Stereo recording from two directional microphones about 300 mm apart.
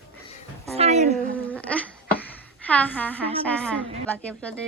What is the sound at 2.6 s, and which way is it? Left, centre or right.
Speech, centre.